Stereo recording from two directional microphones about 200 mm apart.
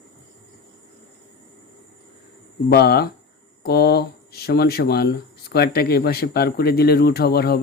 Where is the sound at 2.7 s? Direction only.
55° left (ahead or behind).